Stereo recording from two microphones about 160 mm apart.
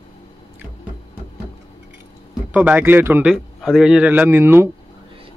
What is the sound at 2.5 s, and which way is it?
A man's voice, 10° right (ahead or behind).